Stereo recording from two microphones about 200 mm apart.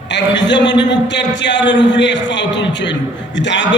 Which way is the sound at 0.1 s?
60° left (ahead or behind).